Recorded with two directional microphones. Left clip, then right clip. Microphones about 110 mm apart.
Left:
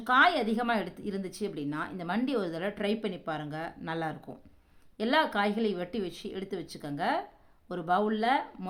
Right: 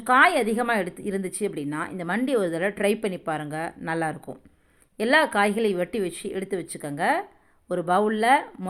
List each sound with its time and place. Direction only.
0.0 s a woman's voice: 35° right (ahead or behind)